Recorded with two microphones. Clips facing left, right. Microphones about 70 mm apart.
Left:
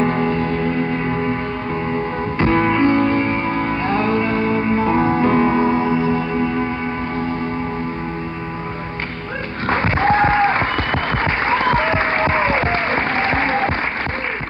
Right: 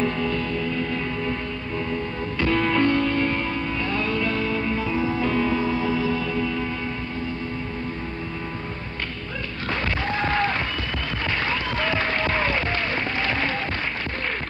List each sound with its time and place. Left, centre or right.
0.0 s music: left
2.3 s music: left
9.7 s music: left
10.3 s a sound: left
10.6 s applause: left
11.3 s music: left